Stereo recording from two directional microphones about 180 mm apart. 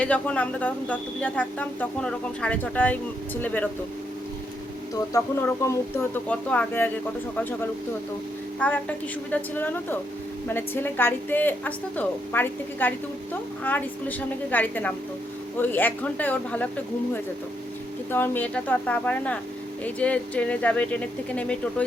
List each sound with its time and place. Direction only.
0.0 s speech: 5° left (ahead or behind)
5.1 s speech: 15° left (ahead or behind)
8.5 s a woman's voice: 10° left (ahead or behind)
18.1 s speech: 10° left (ahead or behind)